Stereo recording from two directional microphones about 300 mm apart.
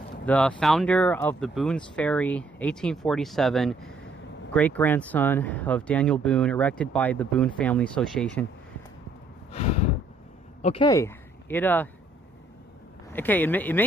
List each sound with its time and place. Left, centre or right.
0.2 s speech: centre
9.5 s a sound: left
10.6 s speech: centre
13.1 s speech: centre